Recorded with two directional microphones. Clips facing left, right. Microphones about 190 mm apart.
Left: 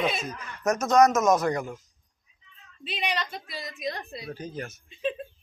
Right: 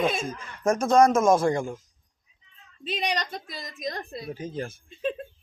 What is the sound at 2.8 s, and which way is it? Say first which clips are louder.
A woman's voice: right 2 dB; 40° right (ahead or behind).